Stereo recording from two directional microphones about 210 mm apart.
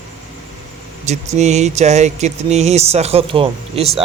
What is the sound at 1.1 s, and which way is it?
Speech, 35° right (ahead or behind).